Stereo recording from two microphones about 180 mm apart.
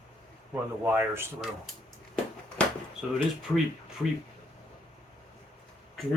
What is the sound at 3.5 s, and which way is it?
Speech, 15° left (ahead or behind).